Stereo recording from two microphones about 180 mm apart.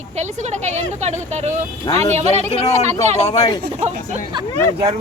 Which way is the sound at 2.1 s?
35° right (ahead or behind).